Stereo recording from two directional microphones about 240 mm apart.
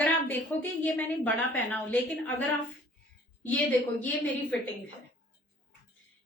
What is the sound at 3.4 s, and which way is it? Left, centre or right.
Speech, centre.